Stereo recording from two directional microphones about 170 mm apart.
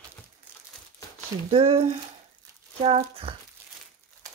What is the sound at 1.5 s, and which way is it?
Speech, 35° right (ahead or behind).